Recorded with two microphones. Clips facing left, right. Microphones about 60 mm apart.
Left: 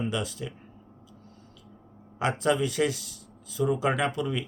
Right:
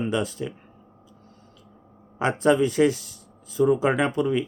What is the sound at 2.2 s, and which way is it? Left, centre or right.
Speech, right.